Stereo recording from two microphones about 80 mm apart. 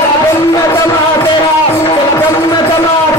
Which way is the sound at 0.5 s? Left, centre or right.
Left.